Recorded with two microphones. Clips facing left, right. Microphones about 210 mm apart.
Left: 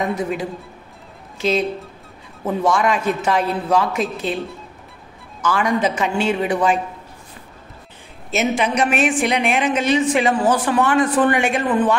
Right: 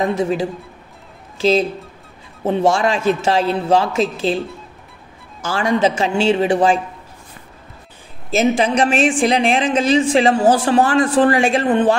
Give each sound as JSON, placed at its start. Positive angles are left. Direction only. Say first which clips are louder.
{"t": 0.0, "sound": "a man's voice", "louder": "right 4 dB", "side_deg": -30}
{"t": 5.4, "sound": "a man's voice", "louder": "right 2 dB", "side_deg": -30}
{"t": 8.3, "sound": "a woman's voice", "louder": "right 4 dB", "side_deg": -30}